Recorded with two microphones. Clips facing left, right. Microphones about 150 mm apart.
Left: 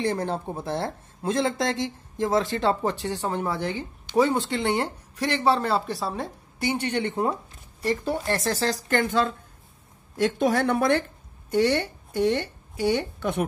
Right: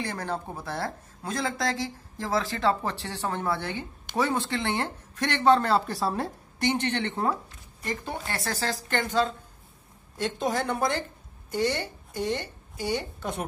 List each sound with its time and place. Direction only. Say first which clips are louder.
0.0 s speech: left 6 dB; 25° left (ahead or behind); by 6.7 s centre (ahead or behind)
6.7 s speech: left 2 dB; 10° left (ahead or behind)
8.4 s a woman's voice: left 5 dB; 45° left (ahead or behind)
10.2 s a woman's voice: left 6 dB; 60° left (ahead or behind)